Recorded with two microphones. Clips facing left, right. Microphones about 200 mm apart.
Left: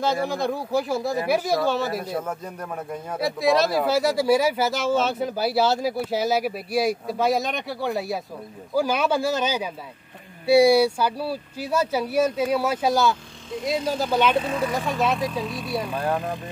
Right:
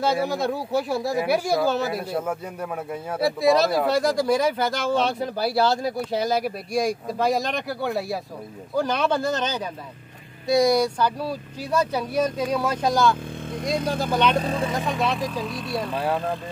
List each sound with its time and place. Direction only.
0.0 s speech: 5° right (ahead or behind)
14.3 s speech: 35° right (ahead or behind)
14.9 s speech: centre (ahead or behind)